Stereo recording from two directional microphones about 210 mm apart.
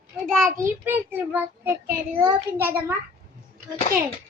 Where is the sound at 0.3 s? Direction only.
Centre (ahead or behind).